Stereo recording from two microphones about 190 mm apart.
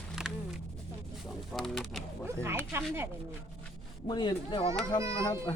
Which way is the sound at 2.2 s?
15° right (ahead or behind).